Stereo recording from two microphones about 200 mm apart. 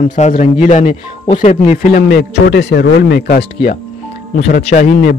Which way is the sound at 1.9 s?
55° left (ahead or behind).